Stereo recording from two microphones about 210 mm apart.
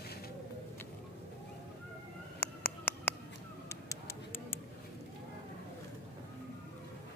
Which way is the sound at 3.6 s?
10° left (ahead or behind).